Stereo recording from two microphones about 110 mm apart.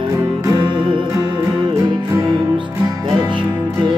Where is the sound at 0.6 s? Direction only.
45° right (ahead or behind).